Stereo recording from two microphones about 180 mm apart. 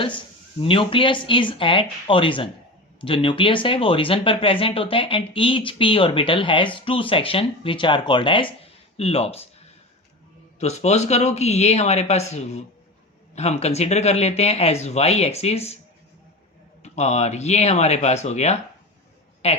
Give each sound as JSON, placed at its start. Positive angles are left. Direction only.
{"t": 0.6, "sound": "speech", "side_deg": 30}
{"t": 10.6, "sound": "speech", "side_deg": 40}
{"t": 16.8, "sound": "a woman's voice", "side_deg": 40}